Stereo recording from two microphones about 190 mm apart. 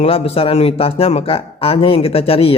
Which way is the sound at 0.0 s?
30° left (ahead or behind).